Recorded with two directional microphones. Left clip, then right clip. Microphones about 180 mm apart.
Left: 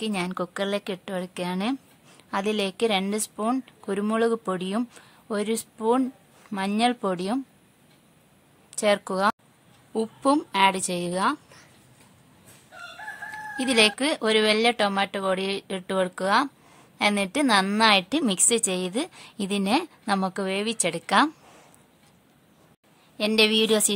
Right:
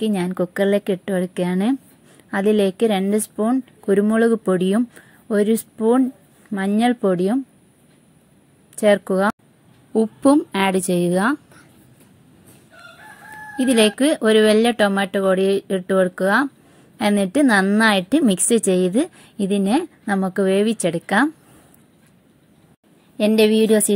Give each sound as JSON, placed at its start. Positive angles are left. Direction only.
{"t": 0.0, "sound": "a woman's voice", "side_deg": -10}
{"t": 8.7, "sound": "a woman's voice", "side_deg": -10}
{"t": 13.6, "sound": "a woman's voice", "side_deg": -10}
{"t": 23.1, "sound": "a woman's voice", "side_deg": -15}